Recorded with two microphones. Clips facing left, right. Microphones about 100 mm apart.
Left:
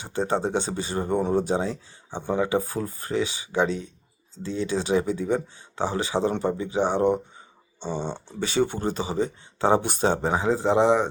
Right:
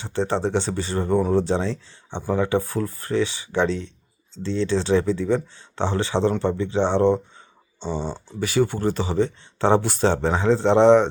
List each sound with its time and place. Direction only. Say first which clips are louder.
0.0 s speech: right 2 dB; 15° left (ahead or behind)